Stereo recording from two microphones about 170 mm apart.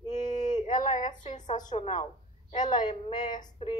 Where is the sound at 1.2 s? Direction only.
45° left (ahead or behind).